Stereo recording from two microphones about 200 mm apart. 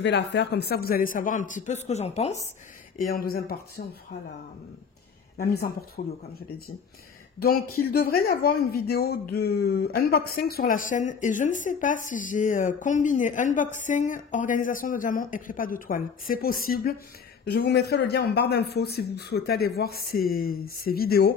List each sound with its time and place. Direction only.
0.0 s speech: 60° left (ahead or behind); by 2.4 s 30° left (ahead or behind)
3.0 s speech: 45° left (ahead or behind)
5.4 s speech: 50° left (ahead or behind)
7.3 s speech: 50° left (ahead or behind)